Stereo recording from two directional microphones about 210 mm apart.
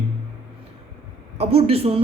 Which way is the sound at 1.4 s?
30° right (ahead or behind).